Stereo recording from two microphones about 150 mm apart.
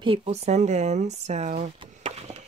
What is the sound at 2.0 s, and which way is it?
Chop, 45° right (ahead or behind).